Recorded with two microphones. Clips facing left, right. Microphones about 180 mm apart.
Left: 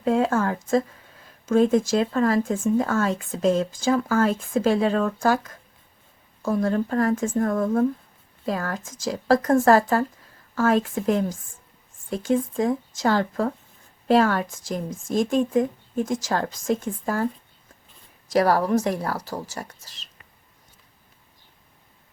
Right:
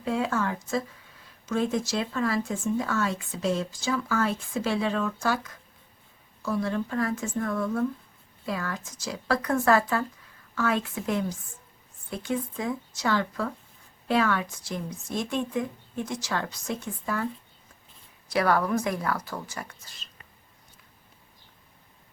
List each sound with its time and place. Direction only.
0.0 s speech: 45° left (ahead or behind)
18.3 s speech: 35° left (ahead or behind)